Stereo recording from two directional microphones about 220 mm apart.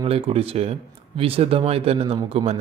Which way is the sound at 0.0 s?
25° right (ahead or behind).